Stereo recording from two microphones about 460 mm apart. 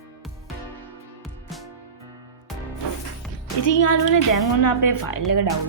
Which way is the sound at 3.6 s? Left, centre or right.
Left.